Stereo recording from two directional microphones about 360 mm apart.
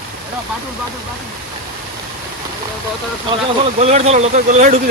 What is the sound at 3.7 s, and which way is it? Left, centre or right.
Speech, centre.